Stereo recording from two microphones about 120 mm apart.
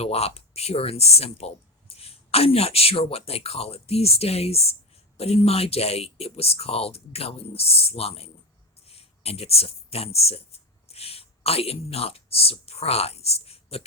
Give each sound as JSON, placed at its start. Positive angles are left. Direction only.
{"t": 0.0, "sound": "speech", "side_deg": 60}